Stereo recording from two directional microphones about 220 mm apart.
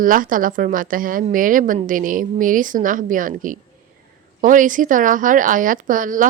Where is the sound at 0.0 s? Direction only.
40° right (ahead or behind).